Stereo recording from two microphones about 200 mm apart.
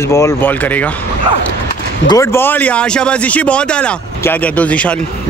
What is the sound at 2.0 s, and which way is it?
Speech, 15° left (ahead or behind).